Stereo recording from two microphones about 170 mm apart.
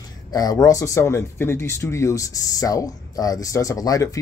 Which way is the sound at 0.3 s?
20° left (ahead or behind).